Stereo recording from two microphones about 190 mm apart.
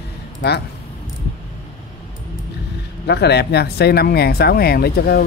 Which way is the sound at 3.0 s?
60° left (ahead or behind).